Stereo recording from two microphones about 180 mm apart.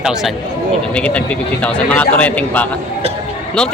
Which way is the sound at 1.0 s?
5° left (ahead or behind).